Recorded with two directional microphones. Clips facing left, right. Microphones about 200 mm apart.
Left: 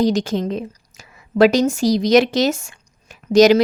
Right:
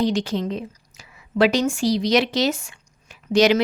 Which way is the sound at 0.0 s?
40° left (ahead or behind).